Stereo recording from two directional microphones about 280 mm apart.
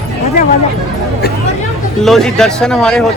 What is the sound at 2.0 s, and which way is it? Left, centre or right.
A man's voice, centre.